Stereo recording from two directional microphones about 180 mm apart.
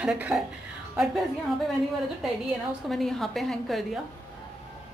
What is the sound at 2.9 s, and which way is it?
A woman's voice, centre (ahead or behind).